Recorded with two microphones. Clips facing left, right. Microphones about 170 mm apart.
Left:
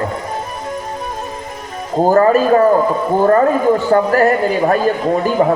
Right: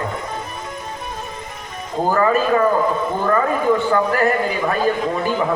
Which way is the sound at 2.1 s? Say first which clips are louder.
Left 6 dB; 40° left (ahead or behind).